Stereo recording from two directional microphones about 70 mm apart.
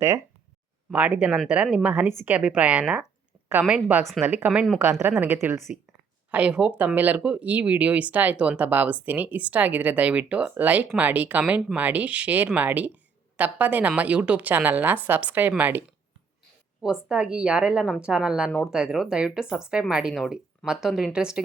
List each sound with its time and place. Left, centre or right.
0.9 s speech: centre
4.3 s speech: right
6.3 s speech: centre
16.8 s speech: centre